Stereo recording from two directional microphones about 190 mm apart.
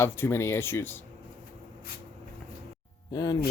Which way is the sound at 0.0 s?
15° left (ahead or behind).